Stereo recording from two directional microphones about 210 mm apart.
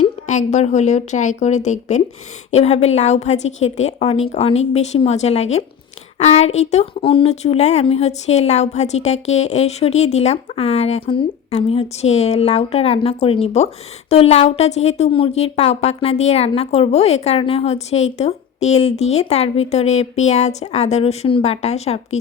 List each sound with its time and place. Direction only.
0.0 s speech: 35° left (ahead or behind)